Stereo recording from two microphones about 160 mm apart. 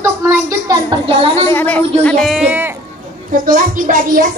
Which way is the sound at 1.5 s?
10° left (ahead or behind).